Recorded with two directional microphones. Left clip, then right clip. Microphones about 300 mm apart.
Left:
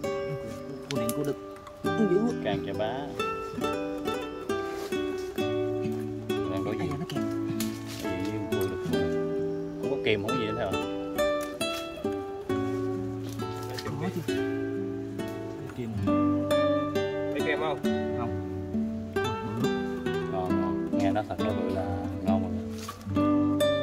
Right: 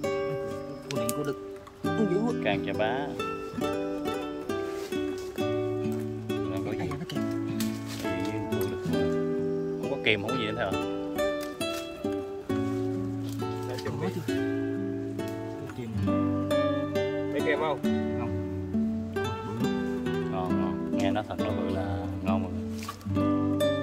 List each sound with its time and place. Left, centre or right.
0.0 s music: centre
14.3 s music: centre
16.1 s music: centre
17.5 s music: centre
17.8 s music: centre
23.1 s music: centre